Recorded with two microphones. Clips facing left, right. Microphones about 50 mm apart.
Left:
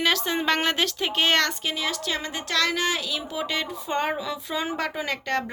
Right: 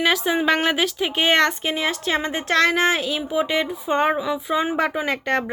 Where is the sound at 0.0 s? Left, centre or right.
Centre.